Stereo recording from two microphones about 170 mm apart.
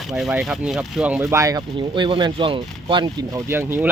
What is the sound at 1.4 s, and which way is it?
Speech, 25° right (ahead or behind).